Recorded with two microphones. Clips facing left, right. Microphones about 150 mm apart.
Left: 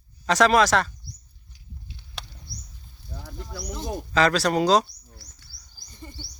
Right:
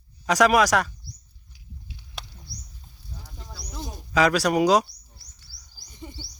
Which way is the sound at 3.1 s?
90° left.